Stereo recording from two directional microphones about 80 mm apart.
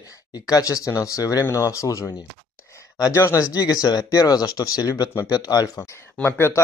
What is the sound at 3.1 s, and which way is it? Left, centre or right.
Speech, left.